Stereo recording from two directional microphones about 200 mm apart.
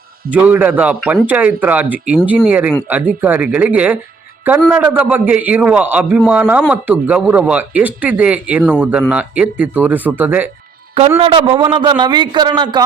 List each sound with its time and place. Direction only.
0.3 s a man's voice: 5° right (ahead or behind)
11.2 s a man's voice: 25° right (ahead or behind)